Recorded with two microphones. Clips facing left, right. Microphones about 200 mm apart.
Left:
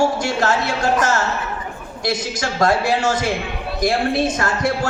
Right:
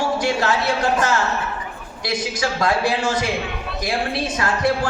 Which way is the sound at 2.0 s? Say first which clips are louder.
Left 1 dB; 45° left (ahead or behind).